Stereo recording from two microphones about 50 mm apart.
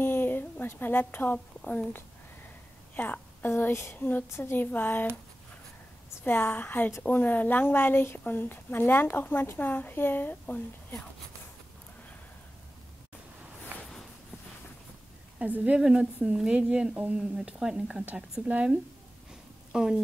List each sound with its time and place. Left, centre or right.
0.0 s a sound: left
1.6 s a woman's voice: left
3.0 s a woman's voice: left
3.5 s a sound: left
3.9 s speech: left
6.2 s speech: left
10.4 s speech: left
15.4 s a woman's voice: right
15.8 s a woman's voice: centre
18.4 s a woman's voice: right
19.7 s speech: centre